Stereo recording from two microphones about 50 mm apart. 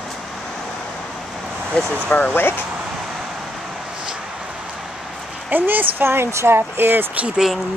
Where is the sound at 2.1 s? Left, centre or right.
Left.